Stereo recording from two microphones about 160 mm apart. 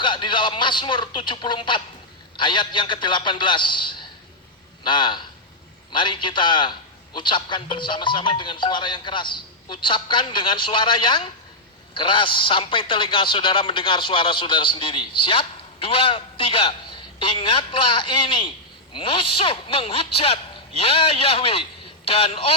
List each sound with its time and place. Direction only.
0.0 s a man's voice: 30° left (ahead or behind)